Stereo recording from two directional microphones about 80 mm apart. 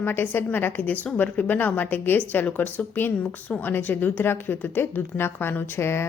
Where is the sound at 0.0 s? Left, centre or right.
Left.